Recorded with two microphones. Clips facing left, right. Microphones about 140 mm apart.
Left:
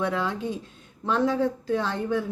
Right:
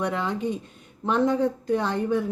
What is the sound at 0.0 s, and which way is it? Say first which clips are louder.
Speech: right 1 dB; 15° right (ahead or behind).